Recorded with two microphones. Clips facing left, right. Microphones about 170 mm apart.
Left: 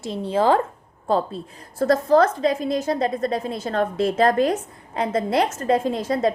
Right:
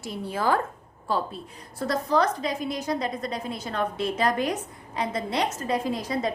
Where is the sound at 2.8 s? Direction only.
50° left (ahead or behind).